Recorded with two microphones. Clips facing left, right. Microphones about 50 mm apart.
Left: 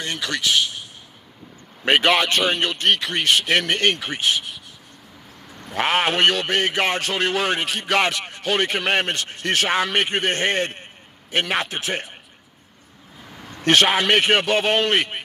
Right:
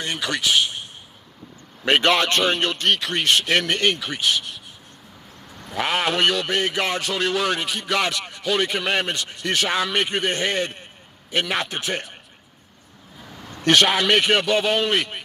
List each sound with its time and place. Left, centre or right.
0.0 s speech: centre
1.8 s a man's voice: centre
3.2 s speech: centre
5.8 s a man's voice: left
11.5 s speech: left
13.5 s a man's voice: left